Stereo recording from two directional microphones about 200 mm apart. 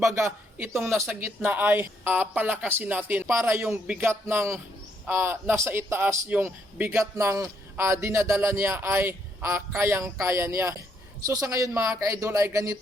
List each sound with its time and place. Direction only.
0.0 s a man's voice: 15° right (ahead or behind)